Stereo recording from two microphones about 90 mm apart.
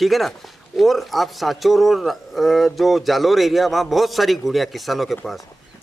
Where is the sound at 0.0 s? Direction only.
Centre (ahead or behind).